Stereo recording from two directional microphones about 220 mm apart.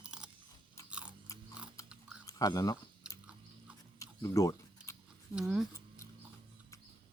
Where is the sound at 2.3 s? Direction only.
15° left (ahead or behind).